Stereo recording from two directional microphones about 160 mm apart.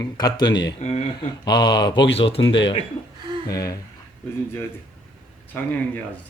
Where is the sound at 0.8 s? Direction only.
45° left (ahead or behind).